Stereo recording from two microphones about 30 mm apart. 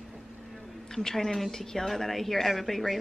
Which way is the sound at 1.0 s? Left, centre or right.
Centre.